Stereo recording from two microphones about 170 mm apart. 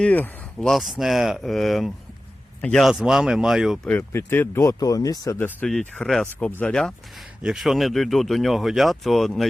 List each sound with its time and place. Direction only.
0.0 s speech: 5° left (ahead or behind)
3.8 s speech: 10° left (ahead or behind)
5.5 s speech: 5° left (ahead or behind)